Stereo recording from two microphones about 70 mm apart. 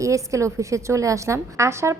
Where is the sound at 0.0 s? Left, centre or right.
Right.